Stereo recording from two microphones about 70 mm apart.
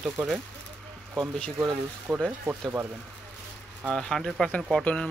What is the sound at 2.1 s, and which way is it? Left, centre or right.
Speech, right.